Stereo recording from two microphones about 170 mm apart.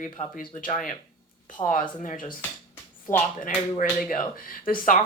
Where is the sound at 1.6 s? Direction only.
30° left (ahead or behind).